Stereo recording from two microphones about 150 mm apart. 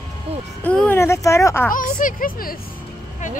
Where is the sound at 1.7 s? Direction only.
65° left (ahead or behind).